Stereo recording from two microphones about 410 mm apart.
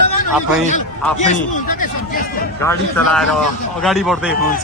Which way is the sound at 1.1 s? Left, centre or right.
Centre.